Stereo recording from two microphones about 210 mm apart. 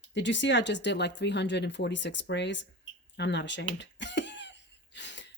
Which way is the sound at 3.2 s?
55° left (ahead or behind).